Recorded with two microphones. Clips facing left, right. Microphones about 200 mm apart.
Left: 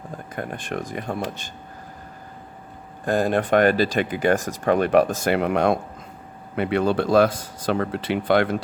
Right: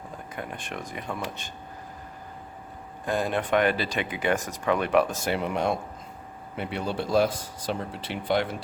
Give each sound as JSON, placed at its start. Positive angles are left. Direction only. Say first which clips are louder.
{"t": 0.3, "sound": "speech", "louder": "left 7 dB", "side_deg": 45}
{"t": 3.1, "sound": "speech", "louder": "left 6 dB", "side_deg": 45}
{"t": 4.4, "sound": "speech", "louder": "left 6 dB", "side_deg": 90}
{"t": 4.6, "sound": "speech", "louder": "left 5 dB", "side_deg": 45}
{"t": 5.2, "sound": "speech", "louder": "left 7 dB", "side_deg": 70}
{"t": 6.6, "sound": "speech", "louder": "left 9 dB", "side_deg": 90}